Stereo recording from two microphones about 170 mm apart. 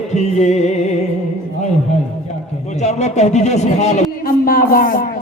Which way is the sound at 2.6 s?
40° left (ahead or behind).